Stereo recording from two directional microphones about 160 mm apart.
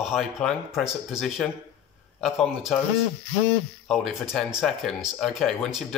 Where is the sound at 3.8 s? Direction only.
Centre (ahead or behind).